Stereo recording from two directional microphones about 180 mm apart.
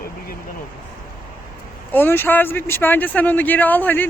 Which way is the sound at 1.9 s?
10° left (ahead or behind).